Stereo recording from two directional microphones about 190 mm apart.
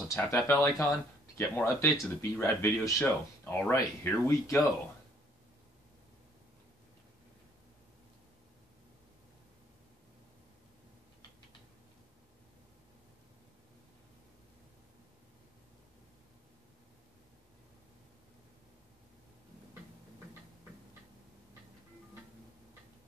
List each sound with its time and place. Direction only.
0.1 s speech: 15° left (ahead or behind)